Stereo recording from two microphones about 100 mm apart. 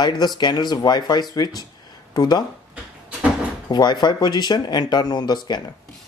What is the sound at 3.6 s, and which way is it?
Speech, 45° left (ahead or behind).